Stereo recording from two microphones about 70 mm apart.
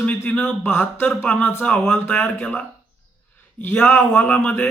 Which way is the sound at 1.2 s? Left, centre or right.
Centre.